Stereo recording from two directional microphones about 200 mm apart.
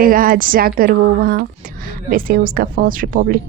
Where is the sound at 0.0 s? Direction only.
45° right (ahead or behind).